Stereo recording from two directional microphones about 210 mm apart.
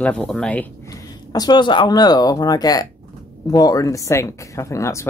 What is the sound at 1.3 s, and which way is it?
Speech, 20° left (ahead or behind).